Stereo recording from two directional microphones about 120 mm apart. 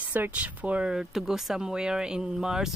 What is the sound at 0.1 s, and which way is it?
Speech, 15° right (ahead or behind).